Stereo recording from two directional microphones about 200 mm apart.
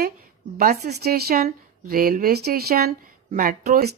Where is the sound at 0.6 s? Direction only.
45° right (ahead or behind).